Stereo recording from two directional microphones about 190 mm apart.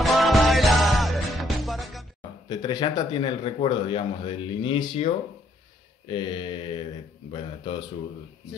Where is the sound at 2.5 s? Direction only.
20° left (ahead or behind).